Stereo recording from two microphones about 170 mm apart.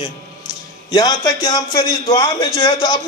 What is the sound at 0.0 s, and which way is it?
A man's voice, 20° left (ahead or behind).